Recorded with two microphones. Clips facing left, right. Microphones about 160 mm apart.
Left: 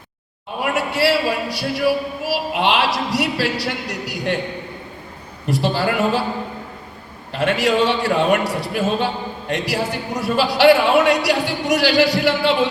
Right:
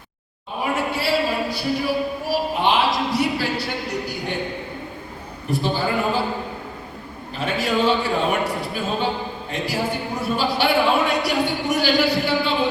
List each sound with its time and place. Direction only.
0.6 s a sound: 85° left
2.2 s a woman's voice: 90° left
5.5 s speech: 85° left
7.3 s speech: 80° left